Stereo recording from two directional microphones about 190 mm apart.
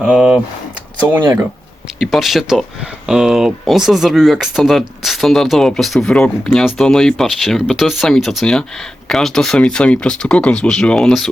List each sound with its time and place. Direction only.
0.0 s a sound: 5° right (ahead or behind)
1.1 s speech: 10° right (ahead or behind)
2.0 s speech: centre (ahead or behind)